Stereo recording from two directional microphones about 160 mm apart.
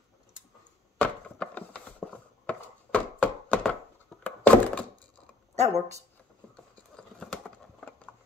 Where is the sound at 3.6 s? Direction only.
10° left (ahead or behind).